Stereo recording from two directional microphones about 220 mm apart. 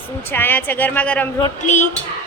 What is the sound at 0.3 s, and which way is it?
A woman's voice, 10° left (ahead or behind).